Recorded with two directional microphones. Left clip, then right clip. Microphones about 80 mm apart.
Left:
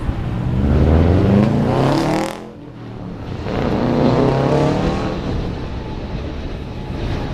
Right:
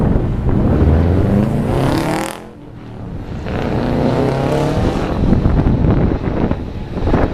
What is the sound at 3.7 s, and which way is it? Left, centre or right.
Vehicle, right.